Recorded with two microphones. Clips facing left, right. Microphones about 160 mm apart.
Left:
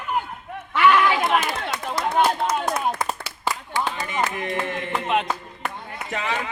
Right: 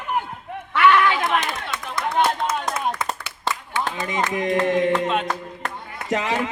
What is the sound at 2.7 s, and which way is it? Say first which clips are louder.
Clapping: left 1 dB; 35° left (ahead or behind).